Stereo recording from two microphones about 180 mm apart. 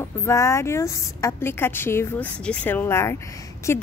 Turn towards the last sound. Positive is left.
turn(degrees=15)  # may be behind; listen again after turning